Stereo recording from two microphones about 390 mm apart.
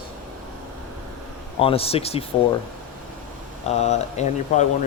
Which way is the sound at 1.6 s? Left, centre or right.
Centre.